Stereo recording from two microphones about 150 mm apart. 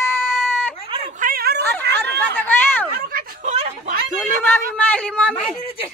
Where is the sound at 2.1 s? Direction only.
10° left (ahead or behind).